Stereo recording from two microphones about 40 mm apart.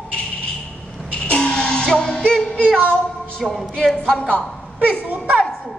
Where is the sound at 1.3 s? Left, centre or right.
Left.